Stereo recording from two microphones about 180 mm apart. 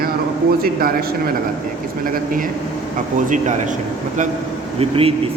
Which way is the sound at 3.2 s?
45° right (ahead or behind).